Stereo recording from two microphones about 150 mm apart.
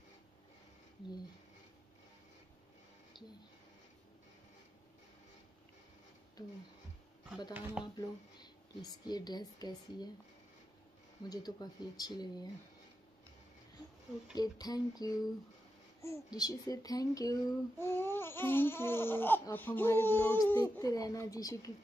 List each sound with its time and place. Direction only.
7.5 s speech: 10° right (ahead or behind)
7.8 s speech: 30° left (ahead or behind)
11.2 s speech: 25° left (ahead or behind)
14.3 s a child's voice: 25° left (ahead or behind)
20.8 s speech: 25° left (ahead or behind)